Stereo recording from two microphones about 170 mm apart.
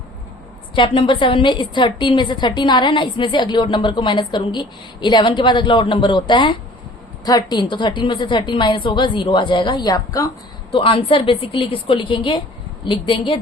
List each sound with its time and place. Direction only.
0.8 s a woman's voice: 30° left (ahead or behind)